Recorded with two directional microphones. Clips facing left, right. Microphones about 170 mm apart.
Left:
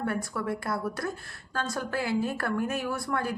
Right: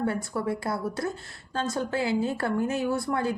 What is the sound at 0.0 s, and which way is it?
A woman's voice, 25° right (ahead or behind).